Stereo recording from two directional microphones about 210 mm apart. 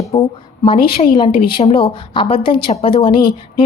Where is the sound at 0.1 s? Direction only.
25° left (ahead or behind).